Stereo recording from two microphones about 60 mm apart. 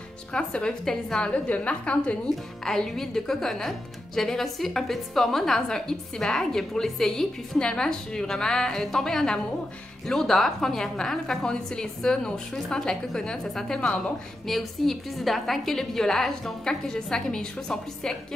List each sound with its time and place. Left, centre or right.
0.3 s speech: centre
1.3 s a woman's voice: left
2.2 s speech: centre
13.7 s speech: centre
14.4 s a woman's voice: centre